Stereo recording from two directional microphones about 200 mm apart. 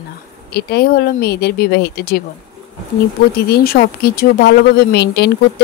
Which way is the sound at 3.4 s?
50° left (ahead or behind).